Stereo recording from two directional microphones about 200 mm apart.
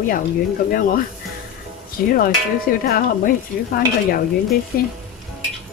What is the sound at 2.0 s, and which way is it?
Stir, 45° left (ahead or behind).